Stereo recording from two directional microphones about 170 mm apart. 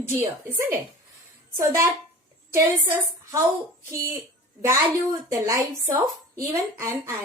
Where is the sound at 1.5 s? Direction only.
15° right (ahead or behind).